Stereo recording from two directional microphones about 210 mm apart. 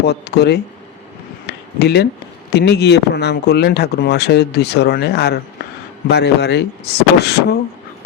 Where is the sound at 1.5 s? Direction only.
50° left (ahead or behind).